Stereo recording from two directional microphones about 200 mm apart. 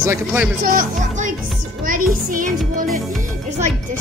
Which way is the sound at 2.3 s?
40° right (ahead or behind).